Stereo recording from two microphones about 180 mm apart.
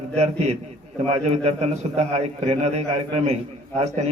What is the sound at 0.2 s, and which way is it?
A man's voice, 35° right (ahead or behind).